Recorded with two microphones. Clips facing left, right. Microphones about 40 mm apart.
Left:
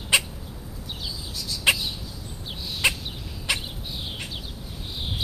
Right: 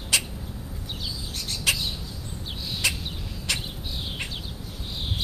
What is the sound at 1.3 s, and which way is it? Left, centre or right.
Chicken, right.